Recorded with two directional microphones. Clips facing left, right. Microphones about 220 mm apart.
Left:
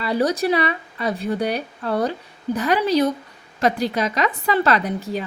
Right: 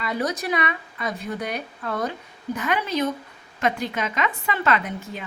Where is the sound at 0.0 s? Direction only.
30° left (ahead or behind).